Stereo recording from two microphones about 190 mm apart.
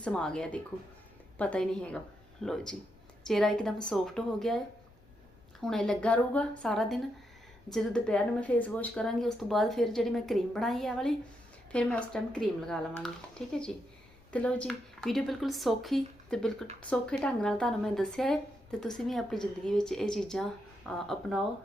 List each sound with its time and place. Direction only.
0.0 s speech: 5° left (ahead or behind)